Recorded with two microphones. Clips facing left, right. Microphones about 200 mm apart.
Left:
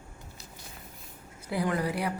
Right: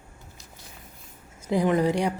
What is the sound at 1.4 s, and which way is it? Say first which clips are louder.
Speech: right 7 dB; 20° right (ahead or behind).